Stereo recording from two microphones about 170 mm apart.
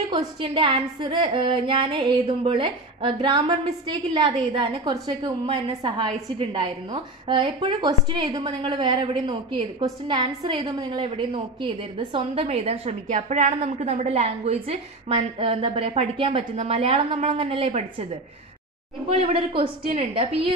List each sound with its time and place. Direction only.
0.4 s music: 30° right (ahead or behind)
9.2 s a woman's voice: 30° right (ahead or behind)
19.0 s a woman's voice: 35° right (ahead or behind)